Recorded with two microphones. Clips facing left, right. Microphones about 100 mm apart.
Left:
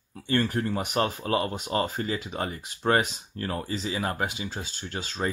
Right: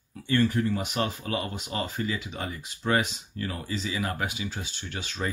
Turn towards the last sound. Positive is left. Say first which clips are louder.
# left 2 dB
turn(degrees=35)  # may be behind; listen again after turning